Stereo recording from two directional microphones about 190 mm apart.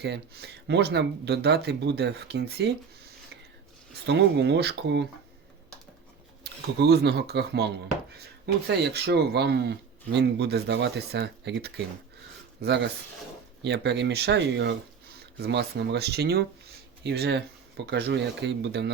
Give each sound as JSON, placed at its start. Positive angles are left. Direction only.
{"t": 0.0, "sound": "speech", "side_deg": -60}
{"t": 4.0, "sound": "speech", "side_deg": -65}
{"t": 6.4, "sound": "speech", "side_deg": -60}